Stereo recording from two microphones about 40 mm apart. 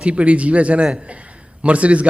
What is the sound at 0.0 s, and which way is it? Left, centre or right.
A man's voice, right.